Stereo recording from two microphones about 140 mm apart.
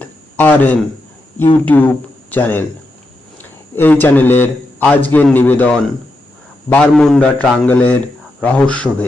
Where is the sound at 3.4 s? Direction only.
15° left (ahead or behind).